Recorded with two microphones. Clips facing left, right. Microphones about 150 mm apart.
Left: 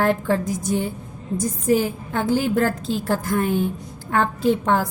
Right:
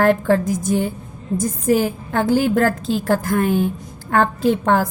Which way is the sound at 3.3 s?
75° right (ahead or behind).